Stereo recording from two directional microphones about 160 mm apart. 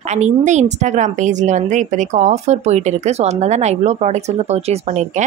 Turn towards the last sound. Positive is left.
turn(degrees=-45)  # may be behind; listen again after turning